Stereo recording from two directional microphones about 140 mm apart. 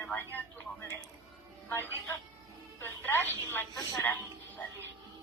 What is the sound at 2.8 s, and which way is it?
Telephone, 15° left (ahead or behind).